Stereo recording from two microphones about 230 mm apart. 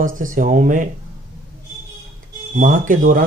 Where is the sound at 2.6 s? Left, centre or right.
Right.